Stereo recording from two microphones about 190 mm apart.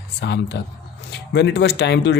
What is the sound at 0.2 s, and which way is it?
Speech, 65° left (ahead or behind).